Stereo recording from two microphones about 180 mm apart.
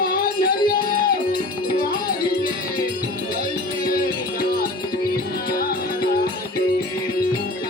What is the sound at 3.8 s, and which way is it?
Music, 55° left (ahead or behind).